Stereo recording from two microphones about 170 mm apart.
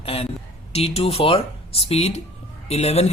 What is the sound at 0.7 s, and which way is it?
A man's voice, 35° left (ahead or behind).